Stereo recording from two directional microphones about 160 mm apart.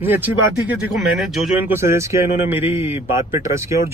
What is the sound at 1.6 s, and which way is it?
A man's voice, 15° right (ahead or behind).